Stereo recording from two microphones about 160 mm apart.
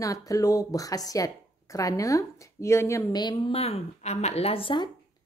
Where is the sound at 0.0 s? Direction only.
20° left (ahead or behind).